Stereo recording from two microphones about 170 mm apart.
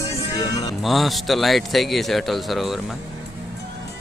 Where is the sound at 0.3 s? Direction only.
25° left (ahead or behind).